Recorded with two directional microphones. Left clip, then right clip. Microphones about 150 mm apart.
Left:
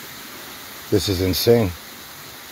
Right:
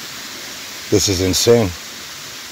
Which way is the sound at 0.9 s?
10° right (ahead or behind).